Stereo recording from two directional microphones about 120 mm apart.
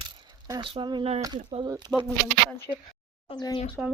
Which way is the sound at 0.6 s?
45° right (ahead or behind).